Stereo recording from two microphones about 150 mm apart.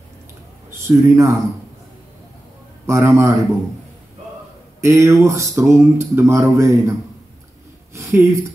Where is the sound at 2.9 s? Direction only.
20° right (ahead or behind).